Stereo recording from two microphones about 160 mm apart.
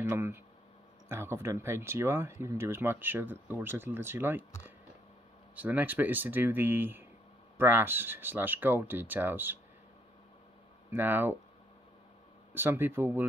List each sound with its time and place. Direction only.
0.1 s speech: 15° right (ahead or behind)
5.6 s speech: 10° right (ahead or behind)
10.9 s speech: 15° right (ahead or behind)
12.5 s speech: 15° right (ahead or behind)